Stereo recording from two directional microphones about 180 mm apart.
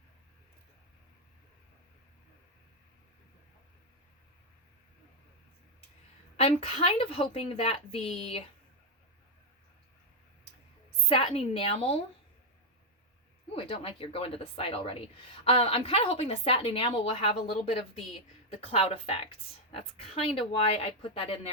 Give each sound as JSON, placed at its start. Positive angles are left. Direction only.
{"t": 6.3, "sound": "speech", "side_deg": 35}
{"t": 11.1, "sound": "speech", "side_deg": 30}
{"t": 13.5, "sound": "speech", "side_deg": 30}